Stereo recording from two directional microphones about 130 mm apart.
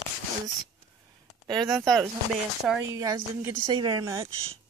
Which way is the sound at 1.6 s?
Centre (ahead or behind).